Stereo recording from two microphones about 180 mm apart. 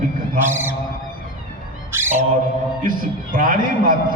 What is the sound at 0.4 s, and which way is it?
Speech, 10° right (ahead or behind).